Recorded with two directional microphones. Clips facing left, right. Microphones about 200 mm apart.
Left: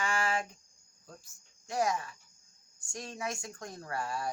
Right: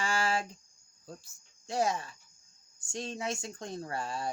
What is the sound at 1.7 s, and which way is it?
Speech, 30° right (ahead or behind).